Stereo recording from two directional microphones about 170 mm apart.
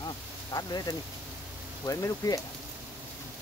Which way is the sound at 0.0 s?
25° left (ahead or behind).